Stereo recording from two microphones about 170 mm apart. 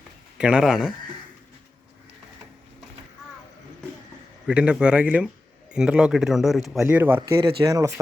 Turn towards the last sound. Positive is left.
turn(degrees=-20)  # may be behind; listen again after turning